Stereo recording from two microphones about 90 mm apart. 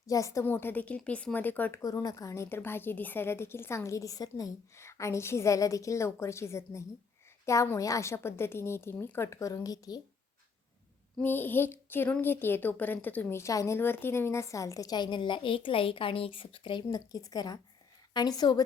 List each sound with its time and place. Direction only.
0.1 s a woman's voice: 35° left (ahead or behind)
0.4 s a woman's voice: 25° left (ahead or behind)
1.8 s a woman's voice: 45° left (ahead or behind)
11.2 s a woman's voice: 20° left (ahead or behind)
13.4 s a woman's voice: 35° left (ahead or behind); by 16.8 s 70° left (ahead or behind)
16.9 s speech: 40° left (ahead or behind)